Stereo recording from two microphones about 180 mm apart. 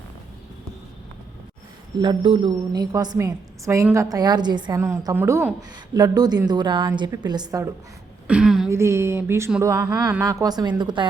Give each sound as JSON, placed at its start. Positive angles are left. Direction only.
{"t": 2.0, "sound": "a woman's voice", "side_deg": -30}
{"t": 8.3, "sound": "speech", "side_deg": -5}
{"t": 8.7, "sound": "a woman's voice", "side_deg": -15}